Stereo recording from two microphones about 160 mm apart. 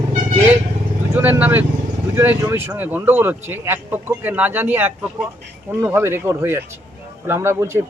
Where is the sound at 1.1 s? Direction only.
10° right (ahead or behind).